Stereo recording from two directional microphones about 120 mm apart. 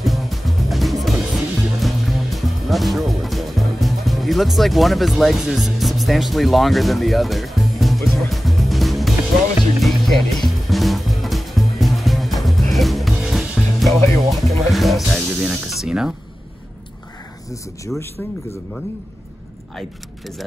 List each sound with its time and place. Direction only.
0.0 s music: centre (ahead or behind)
14.3 s snake: centre (ahead or behind)
17.5 s speech: 25° left (ahead or behind)